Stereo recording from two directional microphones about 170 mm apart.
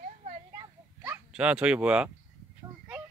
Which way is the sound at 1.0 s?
5° right (ahead or behind).